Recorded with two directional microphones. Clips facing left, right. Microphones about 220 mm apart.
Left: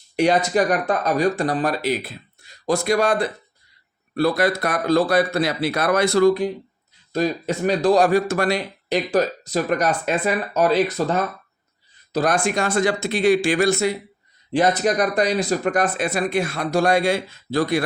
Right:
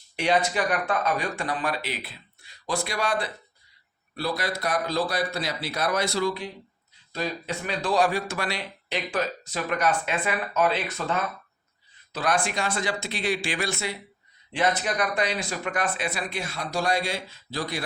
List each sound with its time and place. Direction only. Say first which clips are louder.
0.2 s speech: left 6 dB; 40° left (ahead or behind)